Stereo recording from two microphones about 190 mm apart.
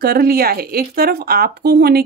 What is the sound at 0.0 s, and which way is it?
Speech, 55° right (ahead or behind).